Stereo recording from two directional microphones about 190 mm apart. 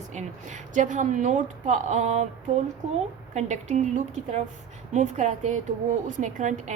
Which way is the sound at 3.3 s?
40° right (ahead or behind).